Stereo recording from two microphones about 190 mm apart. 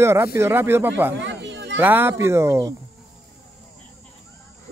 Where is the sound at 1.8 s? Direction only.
10° right (ahead or behind).